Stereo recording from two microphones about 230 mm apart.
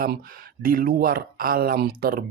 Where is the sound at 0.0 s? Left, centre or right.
Right.